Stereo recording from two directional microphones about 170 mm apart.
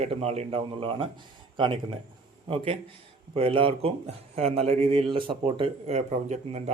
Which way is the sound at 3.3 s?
30° right (ahead or behind).